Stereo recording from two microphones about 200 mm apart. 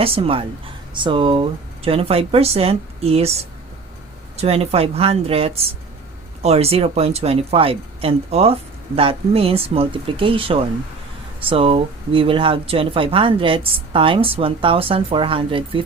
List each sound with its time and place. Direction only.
0.0 s speech: 30° right (ahead or behind)